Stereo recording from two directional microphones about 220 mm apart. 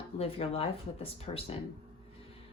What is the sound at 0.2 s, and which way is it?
Speech, 25° left (ahead or behind).